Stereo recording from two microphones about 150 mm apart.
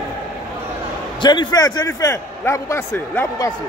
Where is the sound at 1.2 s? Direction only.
30° left (ahead or behind).